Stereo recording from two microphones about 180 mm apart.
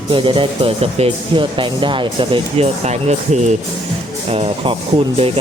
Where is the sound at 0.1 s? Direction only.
30° right (ahead or behind).